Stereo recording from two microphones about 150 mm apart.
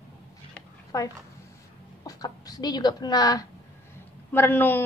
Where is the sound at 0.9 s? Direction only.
20° left (ahead or behind).